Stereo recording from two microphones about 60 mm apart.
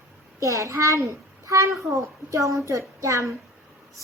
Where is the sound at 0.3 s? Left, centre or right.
Right.